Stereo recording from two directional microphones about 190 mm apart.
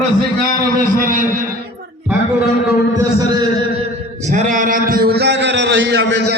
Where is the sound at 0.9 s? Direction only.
45° right (ahead or behind).